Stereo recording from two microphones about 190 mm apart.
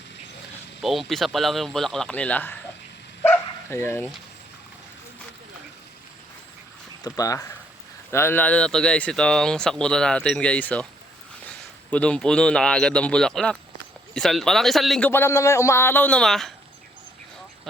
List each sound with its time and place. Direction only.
0.8 s speech: centre (ahead or behind)
3.2 s bow-wow: 15° left (ahead or behind)
7.0 s a man's voice: 20° left (ahead or behind); by 16.5 s centre (ahead or behind)